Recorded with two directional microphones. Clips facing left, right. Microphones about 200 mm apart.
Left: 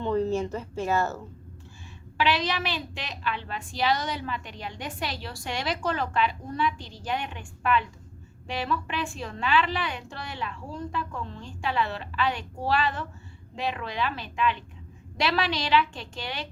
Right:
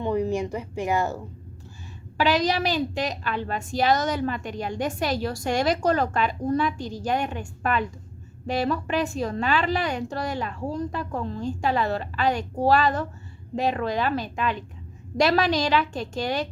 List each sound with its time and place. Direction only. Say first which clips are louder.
0.0 s speech: right 1 dB; 15° right (ahead or behind)
2.1 s a woman's voice: right 4 dB; 40° right (ahead or behind)